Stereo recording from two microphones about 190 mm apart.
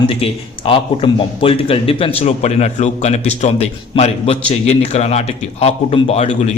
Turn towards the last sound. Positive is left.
turn(degrees=35)  # may be behind; listen again after turning